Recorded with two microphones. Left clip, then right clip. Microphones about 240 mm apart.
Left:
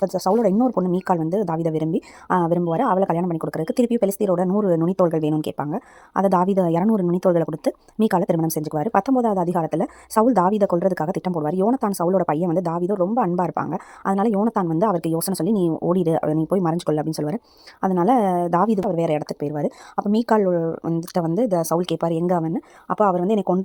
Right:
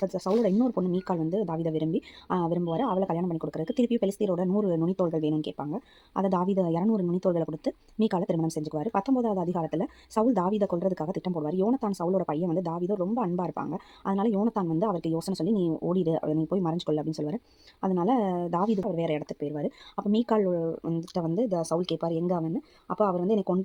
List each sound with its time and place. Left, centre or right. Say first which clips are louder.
0.0 s speech: left 7 dB; left